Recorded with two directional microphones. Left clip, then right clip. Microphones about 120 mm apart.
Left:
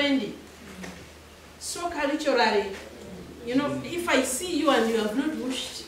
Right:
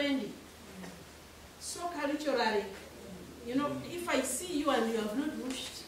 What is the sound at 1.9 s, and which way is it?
A woman's voice, centre (ahead or behind).